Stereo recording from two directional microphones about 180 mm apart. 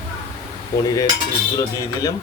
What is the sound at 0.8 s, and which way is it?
Speech, 20° left (ahead or behind).